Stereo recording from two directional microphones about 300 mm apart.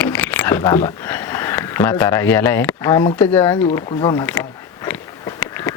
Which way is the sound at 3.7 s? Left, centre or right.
Centre.